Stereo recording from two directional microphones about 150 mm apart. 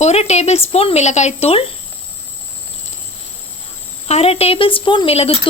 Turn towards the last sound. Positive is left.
turn(degrees=40)  # may be behind; listen again after turning